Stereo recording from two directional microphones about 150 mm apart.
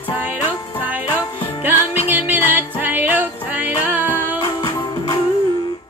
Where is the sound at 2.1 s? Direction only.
10° right (ahead or behind).